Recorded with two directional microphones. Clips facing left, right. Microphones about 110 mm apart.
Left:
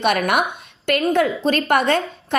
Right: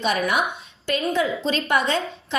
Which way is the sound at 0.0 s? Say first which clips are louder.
Left 4 dB; 65° left (ahead or behind).